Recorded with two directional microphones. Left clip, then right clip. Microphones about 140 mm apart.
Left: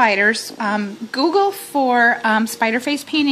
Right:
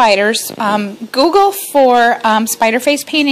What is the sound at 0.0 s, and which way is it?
A woman's voice, 35° right (ahead or behind).